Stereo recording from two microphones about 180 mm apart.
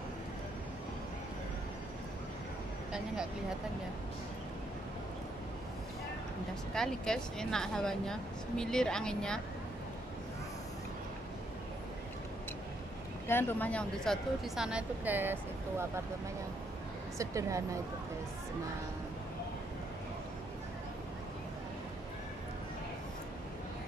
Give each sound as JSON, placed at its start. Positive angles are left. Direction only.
{"t": 6.7, "sound": "speech", "side_deg": 5}
{"t": 13.3, "sound": "speech", "side_deg": 10}
{"t": 17.2, "sound": "speech", "side_deg": -15}